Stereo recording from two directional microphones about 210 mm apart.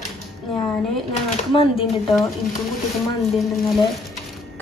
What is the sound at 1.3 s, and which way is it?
Speech, 25° left (ahead or behind).